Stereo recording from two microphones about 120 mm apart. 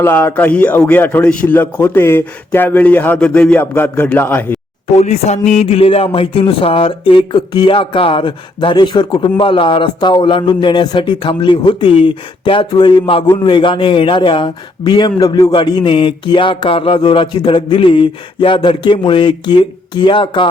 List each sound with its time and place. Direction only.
0.0 s a man's voice: 20° left (ahead or behind)
4.9 s speech: 65° left (ahead or behind); by 20.5 s 45° left (ahead or behind)